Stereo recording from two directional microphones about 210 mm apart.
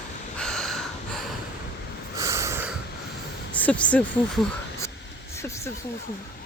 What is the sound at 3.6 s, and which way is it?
Speech, 5° left (ahead or behind).